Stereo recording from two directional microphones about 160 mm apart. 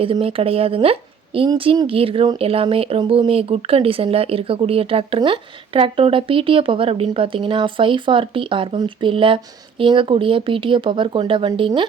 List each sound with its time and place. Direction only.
0.0 s speech: 35° right (ahead or behind)